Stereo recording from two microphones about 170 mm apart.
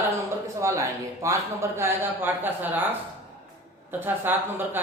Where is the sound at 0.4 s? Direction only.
20° right (ahead or behind).